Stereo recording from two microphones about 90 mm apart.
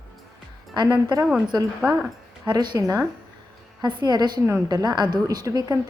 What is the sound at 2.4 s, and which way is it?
Speech, 55° right (ahead or behind).